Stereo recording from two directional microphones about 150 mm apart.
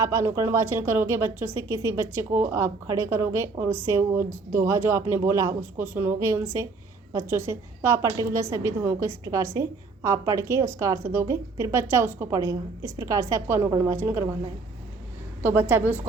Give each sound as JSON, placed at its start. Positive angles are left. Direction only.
{"t": 0.0, "sound": "a woman's voice", "side_deg": -20}
{"t": 15.4, "sound": "a woman's voice", "side_deg": -15}